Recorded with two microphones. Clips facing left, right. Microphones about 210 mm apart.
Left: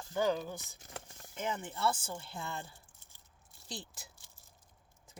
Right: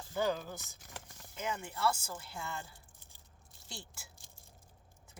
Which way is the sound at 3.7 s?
20° left (ahead or behind).